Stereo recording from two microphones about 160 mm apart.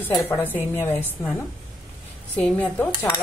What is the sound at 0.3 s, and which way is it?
Speech, 10° left (ahead or behind).